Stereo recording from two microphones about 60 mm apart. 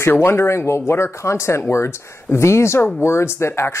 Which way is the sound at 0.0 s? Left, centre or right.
Left.